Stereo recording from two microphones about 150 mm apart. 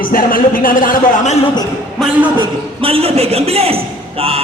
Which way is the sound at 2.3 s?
35° right (ahead or behind).